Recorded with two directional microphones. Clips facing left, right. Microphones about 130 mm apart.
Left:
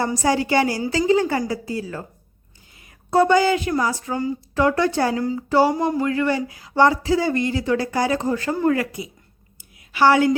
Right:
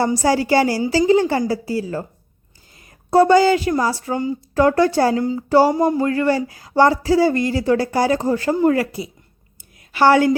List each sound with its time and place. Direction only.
0.0 s speech: 30° right (ahead or behind)
3.1 s speech: 35° right (ahead or behind)
4.5 s speech: 40° right (ahead or behind)
5.5 s speech: 40° right (ahead or behind)
9.9 s a woman's voice: 45° right (ahead or behind)